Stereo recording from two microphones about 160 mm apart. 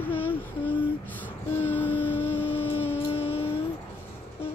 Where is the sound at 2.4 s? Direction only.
35° left (ahead or behind).